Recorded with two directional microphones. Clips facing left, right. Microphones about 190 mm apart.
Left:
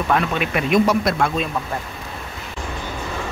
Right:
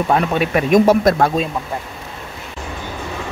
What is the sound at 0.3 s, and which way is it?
Speech, 40° right (ahead or behind).